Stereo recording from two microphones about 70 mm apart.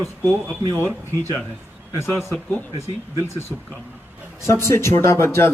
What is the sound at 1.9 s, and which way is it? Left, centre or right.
Speech, left.